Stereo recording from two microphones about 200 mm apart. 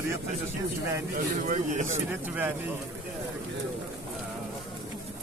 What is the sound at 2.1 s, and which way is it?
Speech, 10° right (ahead or behind).